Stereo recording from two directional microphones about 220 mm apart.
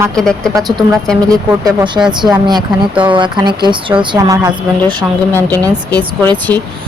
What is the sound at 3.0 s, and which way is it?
A woman's voice, 20° right (ahead or behind).